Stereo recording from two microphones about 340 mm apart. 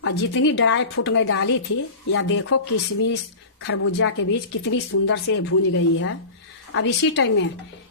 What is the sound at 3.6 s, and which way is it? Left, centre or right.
Speech, left.